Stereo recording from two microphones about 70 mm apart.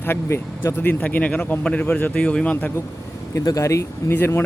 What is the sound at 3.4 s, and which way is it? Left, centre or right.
Speech, left.